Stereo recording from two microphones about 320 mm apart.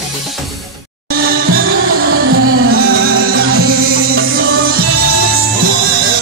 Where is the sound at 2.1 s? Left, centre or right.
Right.